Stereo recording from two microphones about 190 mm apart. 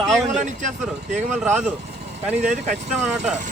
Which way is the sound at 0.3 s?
40° right (ahead or behind).